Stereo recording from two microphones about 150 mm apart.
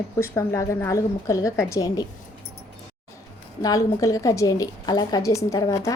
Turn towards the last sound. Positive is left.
turn(degrees=20)  # may be behind; listen again after turning